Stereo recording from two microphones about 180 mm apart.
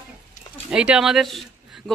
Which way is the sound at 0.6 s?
5° right (ahead or behind).